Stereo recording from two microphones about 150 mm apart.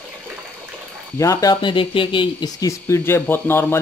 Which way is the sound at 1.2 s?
25° left (ahead or behind).